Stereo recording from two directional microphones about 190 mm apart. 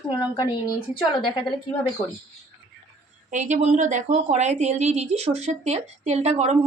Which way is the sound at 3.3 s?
40° right (ahead or behind).